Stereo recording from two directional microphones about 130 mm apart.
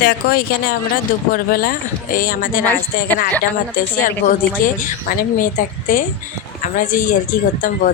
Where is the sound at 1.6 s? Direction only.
90° left.